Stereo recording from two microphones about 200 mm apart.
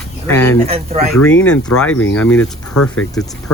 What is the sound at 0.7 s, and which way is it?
Speech, 30° right (ahead or behind).